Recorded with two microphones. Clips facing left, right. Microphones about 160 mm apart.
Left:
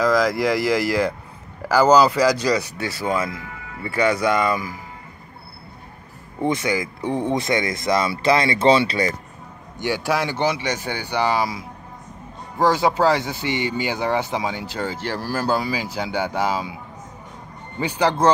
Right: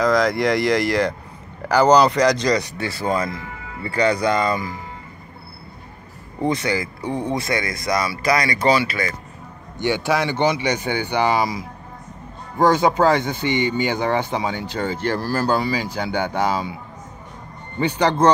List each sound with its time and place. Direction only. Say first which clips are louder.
0.0 s speech: right 1 dB; 5° left (ahead or behind)
3.8 s speech: right 1 dB; 10° left (ahead or behind)
6.4 s speech: even; 15° left (ahead or behind); by 9.1 s 30° left (ahead or behind)
9.8 s speech: right 2 dB; 5° left (ahead or behind)
17.7 s speech: right 1 dB; 10° left (ahead or behind)